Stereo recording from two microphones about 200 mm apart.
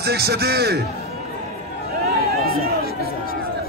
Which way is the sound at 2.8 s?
50° left (ahead or behind).